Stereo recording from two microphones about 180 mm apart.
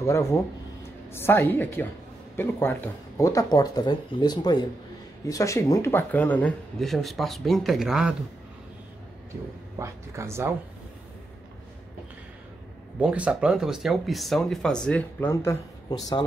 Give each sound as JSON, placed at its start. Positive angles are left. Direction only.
{"t": 0.0, "sound": "a woman's voice", "side_deg": 15}
{"t": 9.8, "sound": "speech", "side_deg": -15}
{"t": 13.0, "sound": "speech", "side_deg": -5}